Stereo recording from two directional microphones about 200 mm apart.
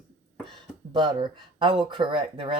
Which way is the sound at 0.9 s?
25° right (ahead or behind).